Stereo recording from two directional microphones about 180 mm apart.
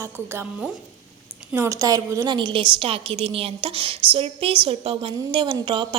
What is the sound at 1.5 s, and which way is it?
A woman's voice, 15° right (ahead or behind).